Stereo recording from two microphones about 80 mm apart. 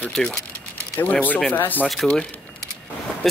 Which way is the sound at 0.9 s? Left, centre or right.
Left.